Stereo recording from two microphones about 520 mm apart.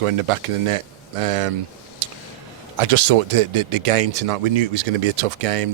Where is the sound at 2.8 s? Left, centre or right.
Right.